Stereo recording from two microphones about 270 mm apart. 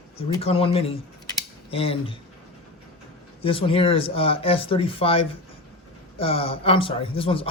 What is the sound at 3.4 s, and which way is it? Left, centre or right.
Speech, centre.